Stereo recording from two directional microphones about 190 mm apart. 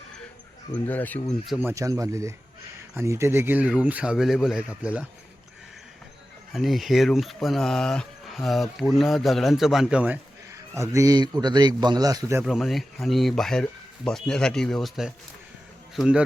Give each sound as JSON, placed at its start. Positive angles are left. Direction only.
{"t": 0.9, "sound": "speech", "side_deg": 10}
{"t": 1.6, "sound": "speech", "side_deg": -15}
{"t": 6.5, "sound": "speech", "side_deg": 0}
{"t": 12.5, "sound": "speech", "side_deg": 0}